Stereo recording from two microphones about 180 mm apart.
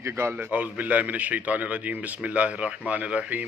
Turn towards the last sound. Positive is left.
turn(degrees=-10)  # may be behind; listen again after turning